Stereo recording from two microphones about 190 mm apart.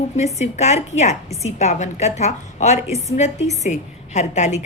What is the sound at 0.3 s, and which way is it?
A woman's voice, 35° left (ahead or behind).